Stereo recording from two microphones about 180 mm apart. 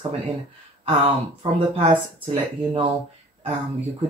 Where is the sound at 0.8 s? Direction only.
30° right (ahead or behind).